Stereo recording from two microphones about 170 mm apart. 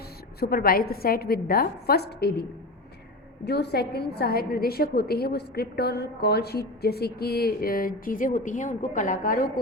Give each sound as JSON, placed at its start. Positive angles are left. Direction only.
{"t": 0.3, "sound": "a woman's voice", "side_deg": 65}